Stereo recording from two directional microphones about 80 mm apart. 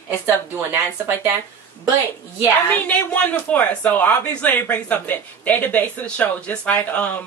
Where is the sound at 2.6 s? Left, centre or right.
Centre.